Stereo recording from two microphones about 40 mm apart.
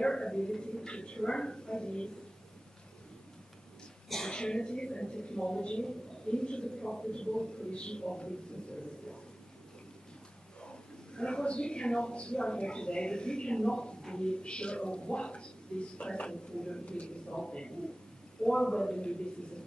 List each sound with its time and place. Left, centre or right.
0.0 s a sound: centre
4.3 s a woman's voice: left
10.6 s a woman's voice: left